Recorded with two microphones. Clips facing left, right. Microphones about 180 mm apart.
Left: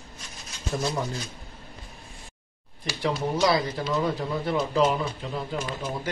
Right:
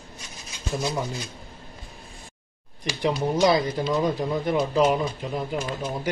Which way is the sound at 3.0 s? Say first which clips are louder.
Right 3 dB; 20° right (ahead or behind).